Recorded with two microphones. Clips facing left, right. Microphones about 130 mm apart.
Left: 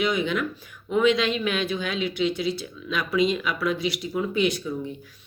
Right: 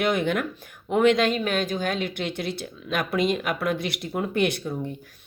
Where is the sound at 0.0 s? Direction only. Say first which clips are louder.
Right 1 dB; 55° right (ahead or behind).